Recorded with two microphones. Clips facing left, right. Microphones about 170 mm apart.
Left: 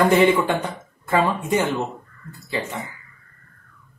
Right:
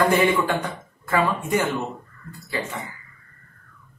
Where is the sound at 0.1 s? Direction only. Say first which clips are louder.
Left 3 dB; 20° left (ahead or behind).